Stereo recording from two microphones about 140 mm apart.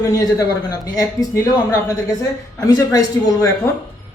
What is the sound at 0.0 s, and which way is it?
A woman's voice, 25° left (ahead or behind).